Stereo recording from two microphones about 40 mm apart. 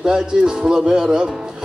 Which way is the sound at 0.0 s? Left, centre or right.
Right.